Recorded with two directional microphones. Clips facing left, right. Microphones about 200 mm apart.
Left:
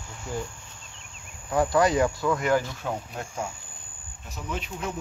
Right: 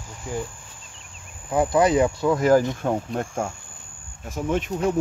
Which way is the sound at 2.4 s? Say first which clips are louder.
Right 7 dB; 40° right (ahead or behind).